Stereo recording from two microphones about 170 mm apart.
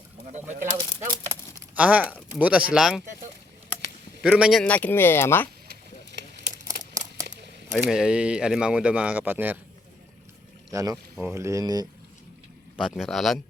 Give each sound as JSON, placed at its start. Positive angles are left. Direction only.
{"t": 0.3, "sound": "speech", "side_deg": -45}
{"t": 1.7, "sound": "speech", "side_deg": -10}
{"t": 4.2, "sound": "speech", "side_deg": -5}
{"t": 6.7, "sound": "a sound", "side_deg": -45}
{"t": 7.3, "sound": "a sound", "side_deg": -75}
{"t": 7.7, "sound": "speech", "side_deg": 0}
{"t": 10.7, "sound": "speech", "side_deg": -20}
{"t": 12.8, "sound": "speech", "side_deg": 0}